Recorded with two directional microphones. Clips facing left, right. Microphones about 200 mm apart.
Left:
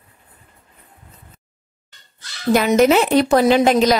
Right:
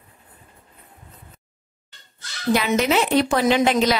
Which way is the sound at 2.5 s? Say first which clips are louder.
Left 6 dB; 45° left (ahead or behind).